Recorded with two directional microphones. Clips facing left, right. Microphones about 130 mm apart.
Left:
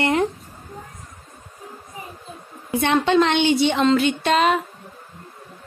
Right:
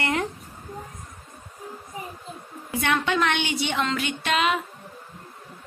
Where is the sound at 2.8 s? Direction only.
30° left (ahead or behind).